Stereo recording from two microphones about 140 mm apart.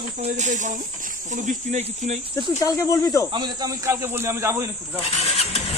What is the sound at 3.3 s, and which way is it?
Speech, 30° right (ahead or behind).